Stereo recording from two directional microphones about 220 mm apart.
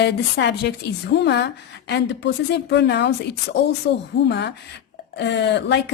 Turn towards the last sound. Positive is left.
turn(degrees=50)  # may be behind; listen again after turning